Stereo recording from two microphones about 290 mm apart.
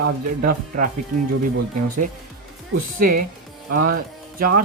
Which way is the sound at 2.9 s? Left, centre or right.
Right.